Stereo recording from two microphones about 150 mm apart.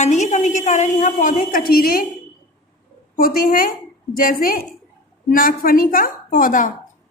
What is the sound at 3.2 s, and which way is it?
A woman's voice, 70° left (ahead or behind).